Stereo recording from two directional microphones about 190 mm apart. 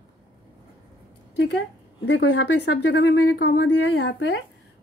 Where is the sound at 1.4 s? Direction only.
60° left (ahead or behind).